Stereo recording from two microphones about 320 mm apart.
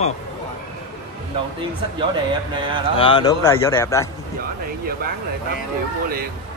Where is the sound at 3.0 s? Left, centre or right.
Centre.